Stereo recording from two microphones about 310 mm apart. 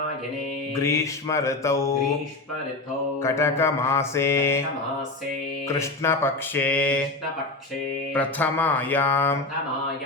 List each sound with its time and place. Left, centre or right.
0.8 s mantra: centre
3.2 s mantra: centre
5.6 s mantra: centre
8.1 s a sound: centre